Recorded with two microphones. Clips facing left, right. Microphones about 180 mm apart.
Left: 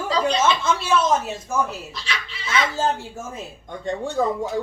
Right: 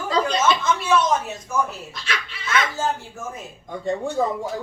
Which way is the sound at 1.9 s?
55° right (ahead or behind).